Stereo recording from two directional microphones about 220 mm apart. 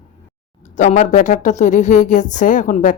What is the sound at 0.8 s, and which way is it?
Speech, 35° left (ahead or behind).